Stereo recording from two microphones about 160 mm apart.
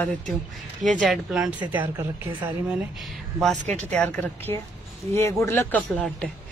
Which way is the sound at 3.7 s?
5° left (ahead or behind).